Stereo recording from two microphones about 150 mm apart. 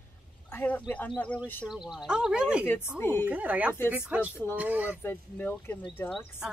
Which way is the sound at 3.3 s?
10° right (ahead or behind).